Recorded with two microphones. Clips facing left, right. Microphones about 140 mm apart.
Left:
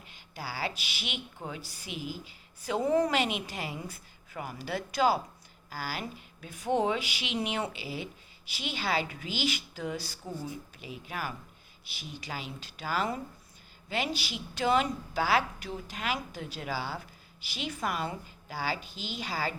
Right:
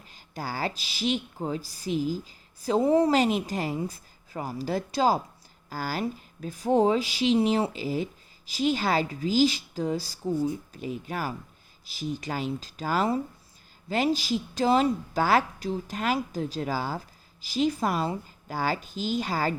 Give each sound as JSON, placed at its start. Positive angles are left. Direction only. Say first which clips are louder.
{"t": 0.0, "sound": "a woman's voice", "louder": "right 5 dB", "side_deg": -40}